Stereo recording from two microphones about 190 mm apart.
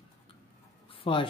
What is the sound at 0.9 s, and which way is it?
Writing, 30° left (ahead or behind).